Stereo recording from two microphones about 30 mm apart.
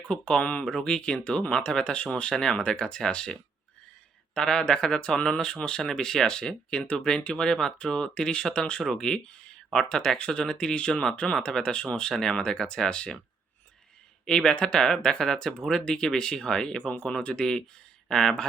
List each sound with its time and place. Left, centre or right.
0.1 s speech: left
2.3 s speech: centre
4.4 s speech: left
9.0 s speech: centre
9.2 s a sound: left
9.7 s speech: left
12.1 s speech: centre
14.3 s speech: left